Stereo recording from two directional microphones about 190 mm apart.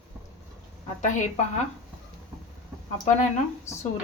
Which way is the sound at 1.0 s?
40° left (ahead or behind).